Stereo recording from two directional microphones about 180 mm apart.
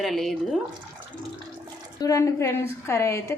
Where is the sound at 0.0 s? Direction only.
Centre (ahead or behind).